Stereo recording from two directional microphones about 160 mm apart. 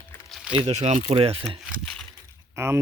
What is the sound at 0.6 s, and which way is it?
Speech, 45° right (ahead or behind).